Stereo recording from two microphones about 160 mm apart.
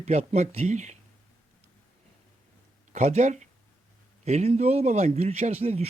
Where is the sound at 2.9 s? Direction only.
45° right (ahead or behind).